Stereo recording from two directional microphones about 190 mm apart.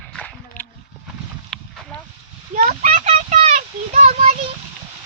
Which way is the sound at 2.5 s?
40° right (ahead or behind).